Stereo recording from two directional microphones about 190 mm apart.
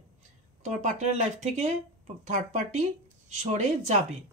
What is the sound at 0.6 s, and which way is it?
Speech, 35° right (ahead or behind).